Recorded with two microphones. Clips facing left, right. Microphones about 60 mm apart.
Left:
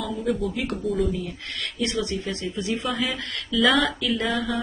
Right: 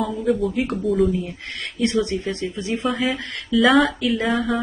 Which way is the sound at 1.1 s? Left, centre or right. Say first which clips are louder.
Right 4 dB; right.